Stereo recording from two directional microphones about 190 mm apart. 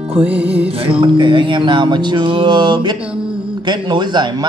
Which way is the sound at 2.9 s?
5° right (ahead or behind).